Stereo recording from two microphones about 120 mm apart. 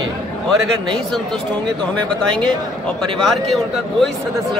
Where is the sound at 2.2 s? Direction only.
5° left (ahead or behind).